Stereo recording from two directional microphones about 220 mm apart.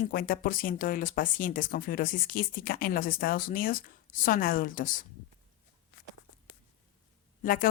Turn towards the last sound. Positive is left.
turn(degrees=40)  # may be behind; listen again after turning